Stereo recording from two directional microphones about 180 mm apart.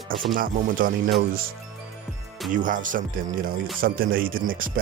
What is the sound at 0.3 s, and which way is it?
Speech, 50° right (ahead or behind).